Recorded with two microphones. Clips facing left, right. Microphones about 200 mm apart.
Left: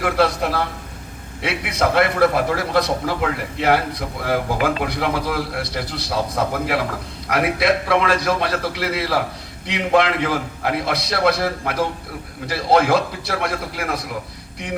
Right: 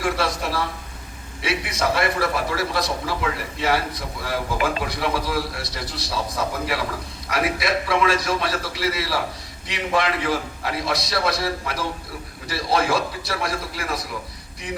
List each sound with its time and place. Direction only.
0.0 s a man's voice: 60° left (ahead or behind)